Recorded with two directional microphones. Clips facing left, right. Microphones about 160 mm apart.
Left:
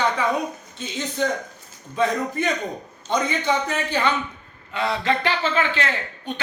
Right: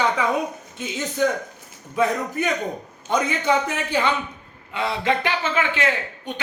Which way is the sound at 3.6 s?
15° right (ahead or behind).